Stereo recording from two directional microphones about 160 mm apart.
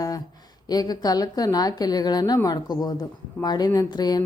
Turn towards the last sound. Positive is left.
turn(degrees=25)  # may be behind; listen again after turning